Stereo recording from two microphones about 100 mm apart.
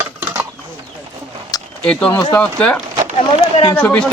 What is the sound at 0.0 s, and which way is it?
Mechanisms, 20° right (ahead or behind).